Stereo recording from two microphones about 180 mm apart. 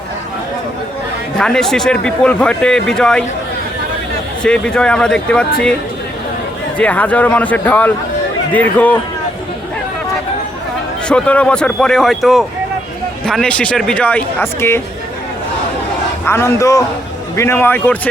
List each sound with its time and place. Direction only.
1.4 s a man's voice: 5° left (ahead or behind)
4.4 s a man's voice: 5° left (ahead or behind)
6.7 s speech: 10° left (ahead or behind)
11.1 s a man's voice: 5° left (ahead or behind)
16.2 s speech: 15° left (ahead or behind)